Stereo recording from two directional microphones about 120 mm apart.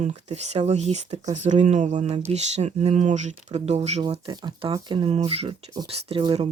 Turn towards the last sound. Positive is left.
turn(degrees=-55)  # may be behind; listen again after turning